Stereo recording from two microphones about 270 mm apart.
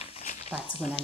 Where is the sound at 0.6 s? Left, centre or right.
Left.